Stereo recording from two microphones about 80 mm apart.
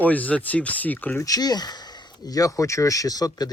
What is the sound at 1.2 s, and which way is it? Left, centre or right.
Speech, left.